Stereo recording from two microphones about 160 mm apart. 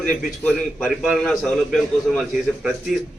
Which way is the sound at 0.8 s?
Centre (ahead or behind).